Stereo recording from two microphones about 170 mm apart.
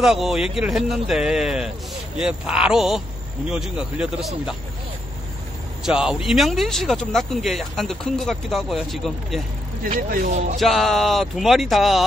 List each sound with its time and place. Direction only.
0.0 s speech: 5° right (ahead or behind)
5.9 s speech: 5° right (ahead or behind)
9.8 s speech: 55° right (ahead or behind)
10.6 s speech: centre (ahead or behind)